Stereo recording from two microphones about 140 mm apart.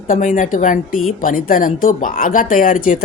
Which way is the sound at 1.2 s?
80° left.